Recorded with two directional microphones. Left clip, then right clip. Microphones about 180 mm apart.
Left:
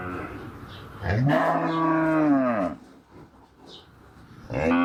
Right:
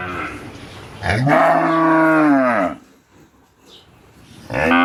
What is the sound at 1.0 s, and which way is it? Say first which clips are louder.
Moo: right 9 dB; 20° left (ahead or behind).